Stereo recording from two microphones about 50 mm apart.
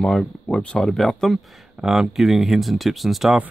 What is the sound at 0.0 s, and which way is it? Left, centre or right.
Speech, centre.